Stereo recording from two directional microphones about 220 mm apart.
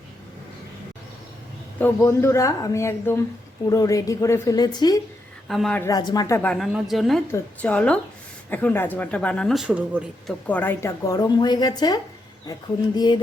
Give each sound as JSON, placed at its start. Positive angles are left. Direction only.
{"t": 1.8, "sound": "speech", "side_deg": 10}
{"t": 5.5, "sound": "speech", "side_deg": 0}
{"t": 10.4, "sound": "speech", "side_deg": 10}
{"t": 13.0, "sound": "music", "side_deg": 20}